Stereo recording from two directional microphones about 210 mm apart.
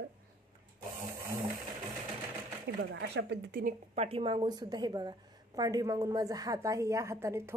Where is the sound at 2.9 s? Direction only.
55° right (ahead or behind).